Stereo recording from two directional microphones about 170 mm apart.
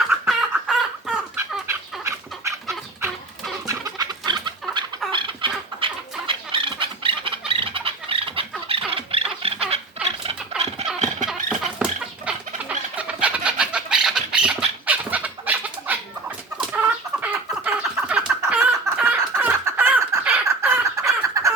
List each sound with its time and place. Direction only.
0.1 s chicken: 5° right (ahead or behind)
1.6 s chicken: 15° right (ahead or behind)
3.7 s chicken: 20° right (ahead or behind)
8.9 s a sound: 35° right (ahead or behind)
10.9 s a sound: 5° right (ahead or behind)
13.2 s bird: 5° right (ahead or behind)
16.6 s chicken: 10° right (ahead or behind)